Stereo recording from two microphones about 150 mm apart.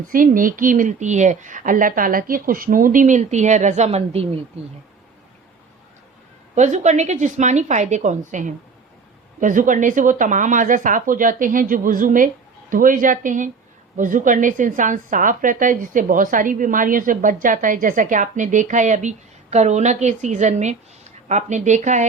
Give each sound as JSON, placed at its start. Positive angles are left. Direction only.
{"t": 0.1, "sound": "a woman's voice", "side_deg": -65}
{"t": 6.6, "sound": "a woman's voice", "side_deg": -50}